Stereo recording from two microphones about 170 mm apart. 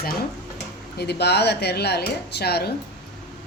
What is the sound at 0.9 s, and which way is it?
Dishes, 75° left (ahead or behind).